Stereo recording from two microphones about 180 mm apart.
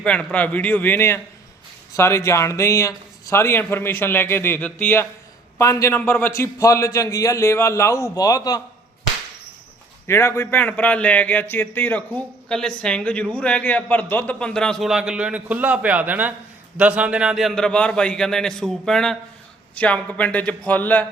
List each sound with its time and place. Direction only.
0.0 s a man's voice: 5° left (ahead or behind)
10.1 s a man's voice: 15° left (ahead or behind)